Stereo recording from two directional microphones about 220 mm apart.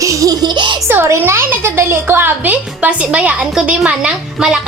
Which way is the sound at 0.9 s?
10° right (ahead or behind).